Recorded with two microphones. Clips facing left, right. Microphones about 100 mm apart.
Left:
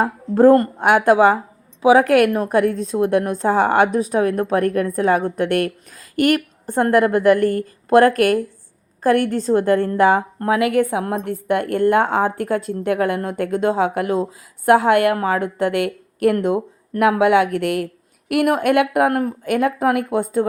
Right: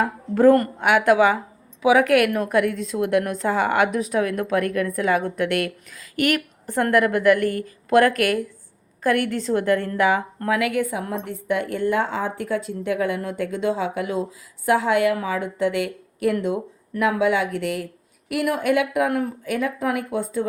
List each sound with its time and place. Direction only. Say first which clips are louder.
0.0 s a woman's voice: left 3 dB; 35° left (ahead or behind)
10.7 s a woman's voice: left 6 dB; 55° left (ahead or behind)